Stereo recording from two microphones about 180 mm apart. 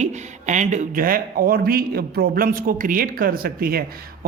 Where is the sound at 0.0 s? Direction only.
40° right (ahead or behind).